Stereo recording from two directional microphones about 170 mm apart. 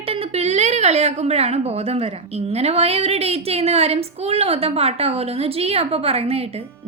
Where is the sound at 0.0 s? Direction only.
35° right (ahead or behind).